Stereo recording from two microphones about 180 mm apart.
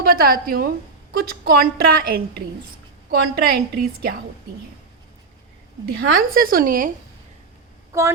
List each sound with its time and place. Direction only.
0.0 s a woman's voice: 55° right (ahead or behind)
6.0 s a woman's voice: 55° right (ahead or behind)
7.9 s child singing: 15° right (ahead or behind)